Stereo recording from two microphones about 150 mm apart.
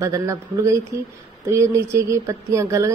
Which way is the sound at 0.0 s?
20° right (ahead or behind).